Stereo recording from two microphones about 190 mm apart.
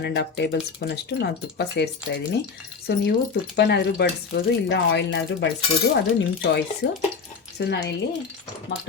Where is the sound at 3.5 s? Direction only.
60° left (ahead or behind).